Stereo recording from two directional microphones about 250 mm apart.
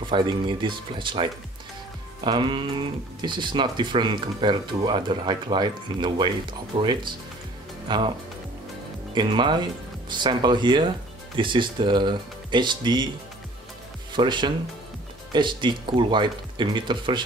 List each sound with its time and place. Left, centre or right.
0.0 s speech: centre
9.1 s speech: centre
14.1 s speech: centre